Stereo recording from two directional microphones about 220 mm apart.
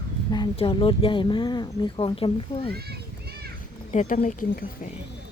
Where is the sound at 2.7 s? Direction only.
45° right (ahead or behind).